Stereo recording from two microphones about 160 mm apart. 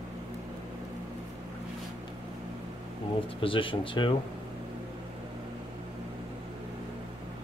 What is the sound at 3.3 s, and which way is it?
Speech, 35° left (ahead or behind).